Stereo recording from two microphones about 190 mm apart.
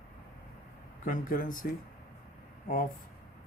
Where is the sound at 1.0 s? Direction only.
45° left (ahead or behind).